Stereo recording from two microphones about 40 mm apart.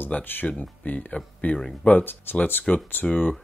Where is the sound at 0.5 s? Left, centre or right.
Left.